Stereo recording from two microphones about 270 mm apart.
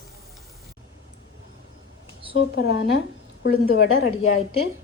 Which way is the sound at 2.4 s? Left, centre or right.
Left.